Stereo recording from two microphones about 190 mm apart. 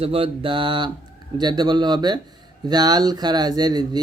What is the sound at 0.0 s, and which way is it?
Speech, 30° right (ahead or behind).